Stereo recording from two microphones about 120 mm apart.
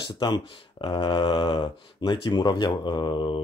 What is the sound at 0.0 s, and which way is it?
Speech, 40° left (ahead or behind).